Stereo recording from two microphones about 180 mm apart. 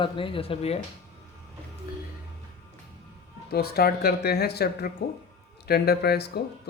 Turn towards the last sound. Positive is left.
turn(degrees=65)  # may be behind; listen again after turning